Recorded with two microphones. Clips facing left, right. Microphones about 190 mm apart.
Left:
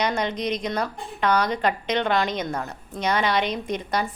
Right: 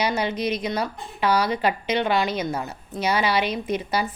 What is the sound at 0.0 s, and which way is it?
A woman's voice, 5° right (ahead or behind).